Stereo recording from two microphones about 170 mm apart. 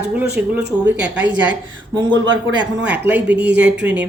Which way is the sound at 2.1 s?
90° right.